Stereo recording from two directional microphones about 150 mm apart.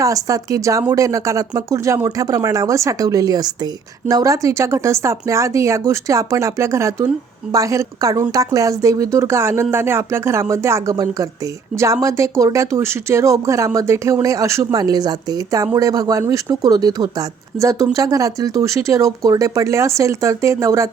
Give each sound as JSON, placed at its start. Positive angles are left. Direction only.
{"t": 0.0, "sound": "speech", "side_deg": -20}